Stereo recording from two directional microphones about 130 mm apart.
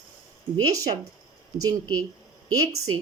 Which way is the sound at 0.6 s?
30° right (ahead or behind).